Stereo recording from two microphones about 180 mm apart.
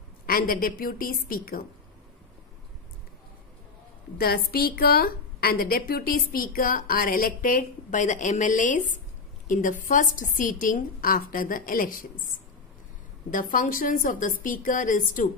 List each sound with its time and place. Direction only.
0.3 s a woman's voice: 55° left (ahead or behind)
4.2 s a woman's voice: 60° left (ahead or behind)